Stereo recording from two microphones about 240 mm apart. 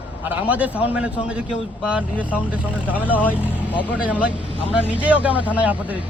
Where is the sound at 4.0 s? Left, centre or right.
Centre.